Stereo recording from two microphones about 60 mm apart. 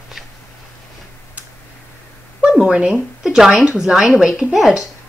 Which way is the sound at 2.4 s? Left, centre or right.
Centre.